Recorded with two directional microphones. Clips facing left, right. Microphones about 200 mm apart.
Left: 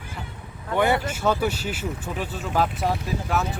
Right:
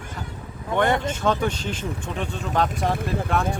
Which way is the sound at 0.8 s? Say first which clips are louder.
Even; 5° left (ahead or behind).